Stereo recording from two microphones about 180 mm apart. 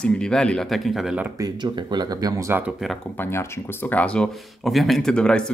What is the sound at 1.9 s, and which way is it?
Speech, 20° right (ahead or behind).